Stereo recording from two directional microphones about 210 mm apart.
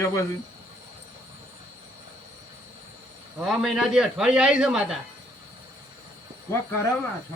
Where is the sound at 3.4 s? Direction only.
Centre (ahead or behind).